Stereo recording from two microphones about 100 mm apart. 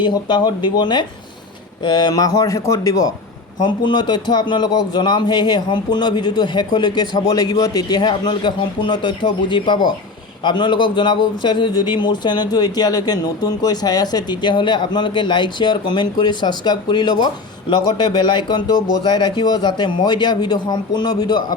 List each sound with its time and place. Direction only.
0.0 s a man's voice: 45° left (ahead or behind)
3.6 s a man's voice: 50° left (ahead or behind)